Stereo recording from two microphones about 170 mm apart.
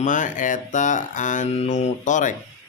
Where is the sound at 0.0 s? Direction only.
50° left (ahead or behind).